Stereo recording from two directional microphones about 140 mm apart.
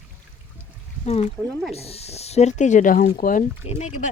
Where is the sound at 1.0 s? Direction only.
50° left (ahead or behind); by 3.4 s 75° left (ahead or behind).